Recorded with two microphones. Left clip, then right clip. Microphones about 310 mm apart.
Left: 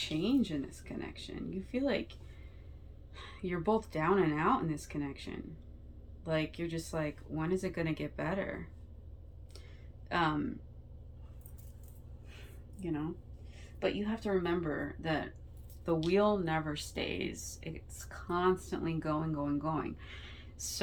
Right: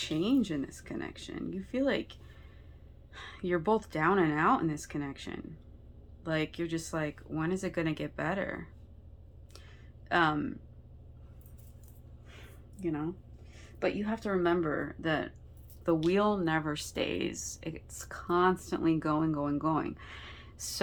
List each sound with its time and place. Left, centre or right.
0.0 s speech: centre
3.2 s speech: centre
10.1 s speech: centre
13.7 s speech: centre